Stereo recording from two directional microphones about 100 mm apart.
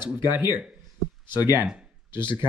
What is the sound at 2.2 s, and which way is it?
Speech, 50° left (ahead or behind).